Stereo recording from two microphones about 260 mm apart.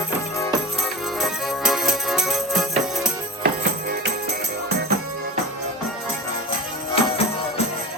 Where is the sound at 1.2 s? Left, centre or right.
Centre.